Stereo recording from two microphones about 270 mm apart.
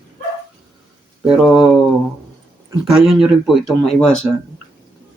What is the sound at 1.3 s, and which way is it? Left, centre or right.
Speech, centre.